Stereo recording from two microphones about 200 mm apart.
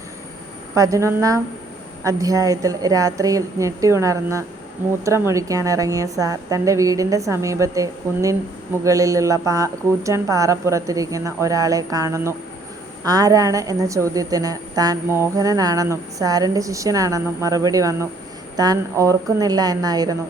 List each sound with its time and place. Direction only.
0.7 s a woman's voice: 15° right (ahead or behind)